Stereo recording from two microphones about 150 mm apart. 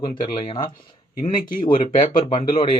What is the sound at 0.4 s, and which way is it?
Speech, 35° left (ahead or behind).